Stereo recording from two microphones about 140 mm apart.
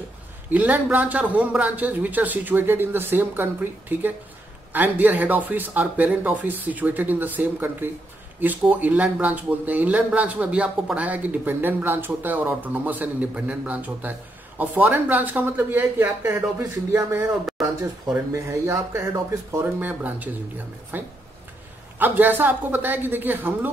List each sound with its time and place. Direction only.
0.5 s speech: 10° right (ahead or behind)
4.7 s speech: 10° right (ahead or behind)
17.3 s speech: centre (ahead or behind)
18.3 s speech: 20° right (ahead or behind)